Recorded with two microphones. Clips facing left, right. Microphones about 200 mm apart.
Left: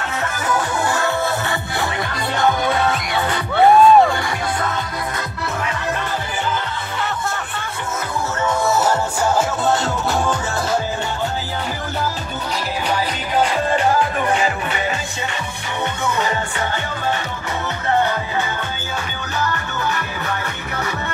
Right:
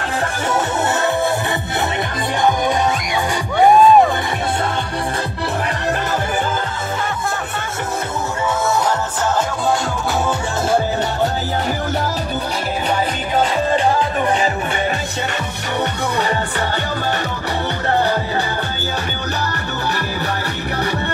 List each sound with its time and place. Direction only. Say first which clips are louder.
0.5 s music: right 1 dB; 20° right (ahead or behind)
2.4 s music: right 1 dB; 15° right (ahead or behind)